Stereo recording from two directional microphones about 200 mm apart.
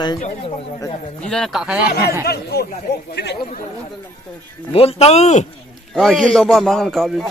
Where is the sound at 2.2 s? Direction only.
50° left (ahead or behind).